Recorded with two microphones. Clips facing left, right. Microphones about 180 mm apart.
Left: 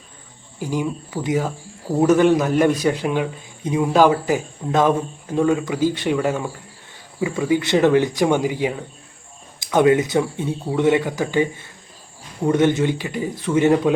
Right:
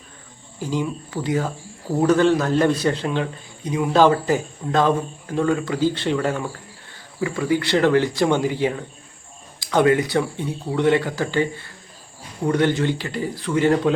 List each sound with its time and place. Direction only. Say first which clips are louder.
0.6 s a man's voice: left 1 dB; 15° left (ahead or behind)
3.9 s a man's voice: even; 10° left (ahead or behind)